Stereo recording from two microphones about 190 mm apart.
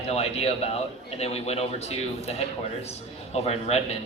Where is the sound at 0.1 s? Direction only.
35° left (ahead or behind).